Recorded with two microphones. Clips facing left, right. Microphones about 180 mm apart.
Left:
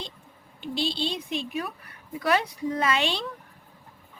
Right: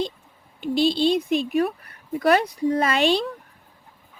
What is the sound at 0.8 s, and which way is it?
Speech, 45° right (ahead or behind).